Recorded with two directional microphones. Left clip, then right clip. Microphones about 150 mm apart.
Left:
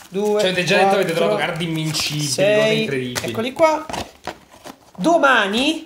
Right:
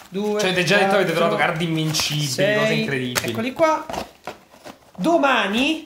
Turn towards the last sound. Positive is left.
turn(degrees=40)  # may be behind; listen again after turning